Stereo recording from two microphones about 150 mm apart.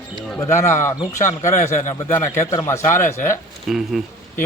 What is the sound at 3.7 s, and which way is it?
Speech, centre (ahead or behind).